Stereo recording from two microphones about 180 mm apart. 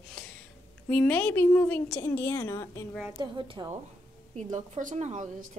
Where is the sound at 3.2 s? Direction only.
25° right (ahead or behind).